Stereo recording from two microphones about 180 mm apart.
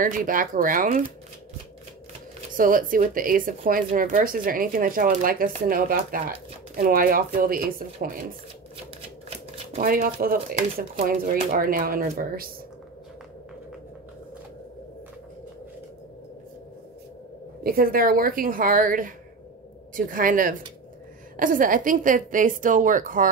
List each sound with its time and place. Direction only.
0.0 s speech: 50° right (ahead or behind)
2.5 s speech: 50° right (ahead or behind)
9.8 s speech: 50° right (ahead or behind)
17.6 s speech: 55° right (ahead or behind)